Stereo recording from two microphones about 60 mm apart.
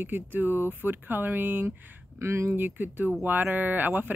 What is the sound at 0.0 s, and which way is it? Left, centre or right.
Speech, right.